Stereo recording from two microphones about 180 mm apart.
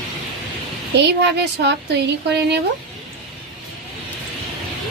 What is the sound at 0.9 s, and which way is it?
Speech, 75° right (ahead or behind).